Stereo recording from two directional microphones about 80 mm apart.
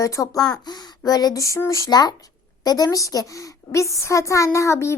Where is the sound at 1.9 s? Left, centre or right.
Left.